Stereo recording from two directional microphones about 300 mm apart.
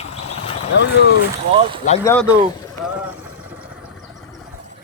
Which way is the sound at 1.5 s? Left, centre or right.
Centre.